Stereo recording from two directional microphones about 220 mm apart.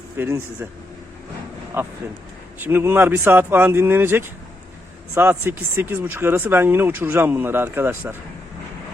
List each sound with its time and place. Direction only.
0.2 s speech: 10° right (ahead or behind)
1.7 s speech: 10° right (ahead or behind)